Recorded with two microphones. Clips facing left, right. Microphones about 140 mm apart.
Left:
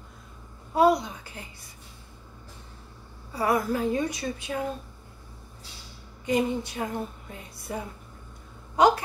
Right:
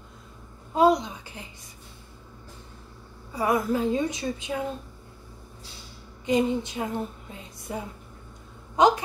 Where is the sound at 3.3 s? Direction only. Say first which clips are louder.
Right 1 dB; 20° right (ahead or behind).